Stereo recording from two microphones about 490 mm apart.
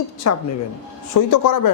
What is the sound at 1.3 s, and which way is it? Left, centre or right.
Speech, left.